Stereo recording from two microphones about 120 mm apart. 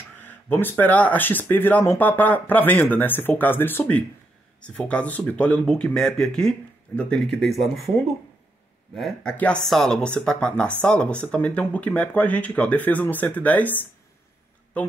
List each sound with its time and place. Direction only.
0.2 s speech: 15° left (ahead or behind)
8.9 s speech: centre (ahead or behind)